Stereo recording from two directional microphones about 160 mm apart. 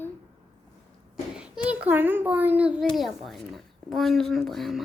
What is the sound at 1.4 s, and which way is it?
A child's voice, 5° right (ahead or behind).